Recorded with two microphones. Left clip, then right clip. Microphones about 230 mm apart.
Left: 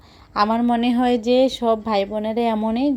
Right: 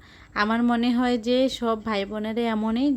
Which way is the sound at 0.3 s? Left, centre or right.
Centre.